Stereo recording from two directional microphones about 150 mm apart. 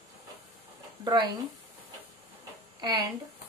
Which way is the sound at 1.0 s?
30° right (ahead or behind).